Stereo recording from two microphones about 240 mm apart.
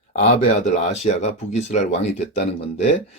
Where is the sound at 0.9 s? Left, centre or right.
Left.